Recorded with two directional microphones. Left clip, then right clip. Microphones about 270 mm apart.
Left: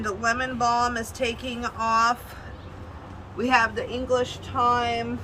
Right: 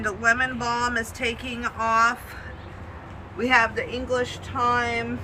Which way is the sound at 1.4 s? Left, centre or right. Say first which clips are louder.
Right 1 dB; left.